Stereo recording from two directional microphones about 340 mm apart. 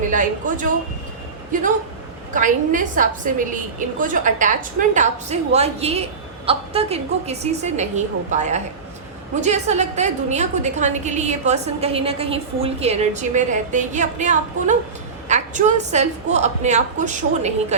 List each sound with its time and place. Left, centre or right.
0.1 s a woman's voice: right